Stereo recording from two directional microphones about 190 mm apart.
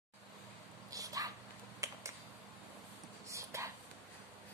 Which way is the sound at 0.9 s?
20° right (ahead or behind).